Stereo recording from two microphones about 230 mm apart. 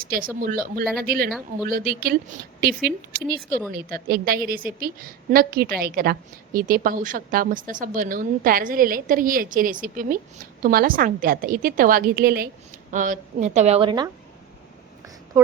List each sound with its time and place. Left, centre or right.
0.3 s a woman's voice: right